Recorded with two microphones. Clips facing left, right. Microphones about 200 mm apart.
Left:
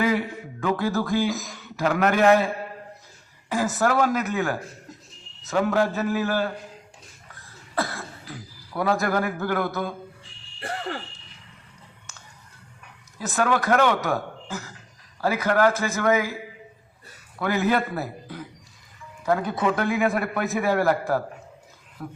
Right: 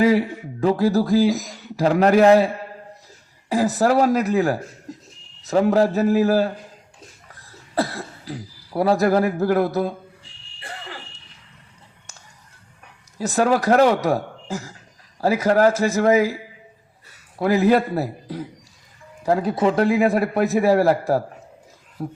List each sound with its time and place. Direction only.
0.0 s a man's voice: 35° right (ahead or behind)
3.5 s a man's voice: 35° right (ahead or behind)
7.8 s speech: 35° right (ahead or behind)
13.1 s a man's voice: 35° right (ahead or behind)